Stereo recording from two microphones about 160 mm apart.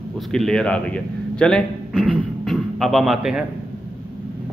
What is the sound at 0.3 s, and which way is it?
A man's voice, 5° left (ahead or behind).